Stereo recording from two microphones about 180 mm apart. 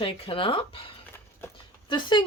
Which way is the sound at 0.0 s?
30° left (ahead or behind).